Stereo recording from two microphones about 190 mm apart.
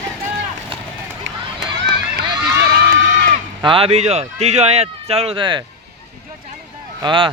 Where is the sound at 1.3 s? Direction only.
75° right (ahead or behind).